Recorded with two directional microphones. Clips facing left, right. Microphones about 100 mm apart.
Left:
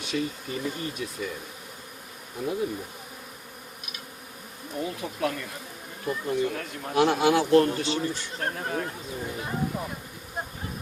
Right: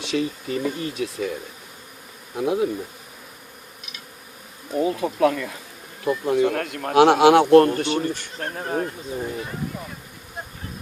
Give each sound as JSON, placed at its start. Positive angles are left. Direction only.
{"t": 0.0, "sound": "speech", "side_deg": -90}
{"t": 2.3, "sound": "bee", "side_deg": -85}
{"t": 4.8, "sound": "speech", "side_deg": -90}
{"t": 8.4, "sound": "speech", "side_deg": -40}